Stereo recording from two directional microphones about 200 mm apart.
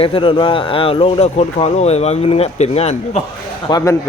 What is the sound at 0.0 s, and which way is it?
Speech, 25° left (ahead or behind).